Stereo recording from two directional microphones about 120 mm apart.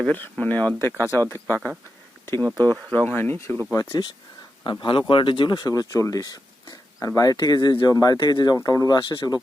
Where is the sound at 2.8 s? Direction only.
10° left (ahead or behind); by 4.1 s 35° left (ahead or behind).